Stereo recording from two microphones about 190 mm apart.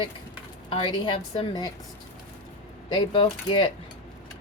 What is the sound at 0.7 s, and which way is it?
Speech, 25° left (ahead or behind).